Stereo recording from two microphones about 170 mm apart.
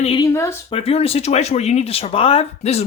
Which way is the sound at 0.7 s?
35° left (ahead or behind).